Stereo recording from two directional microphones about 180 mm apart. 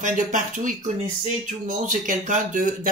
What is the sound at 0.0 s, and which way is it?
Speech, 45° right (ahead or behind).